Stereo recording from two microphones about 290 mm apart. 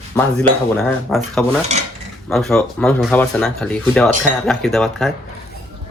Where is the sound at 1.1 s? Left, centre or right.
Centre.